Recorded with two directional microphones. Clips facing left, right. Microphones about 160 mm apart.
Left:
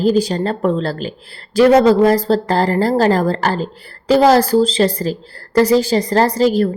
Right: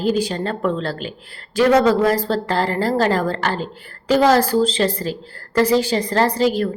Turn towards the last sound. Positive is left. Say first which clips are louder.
# left 4 dB
turn(degrees=40)  # may be behind; listen again after turning